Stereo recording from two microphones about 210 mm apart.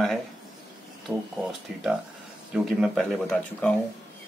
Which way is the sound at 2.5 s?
Centre (ahead or behind).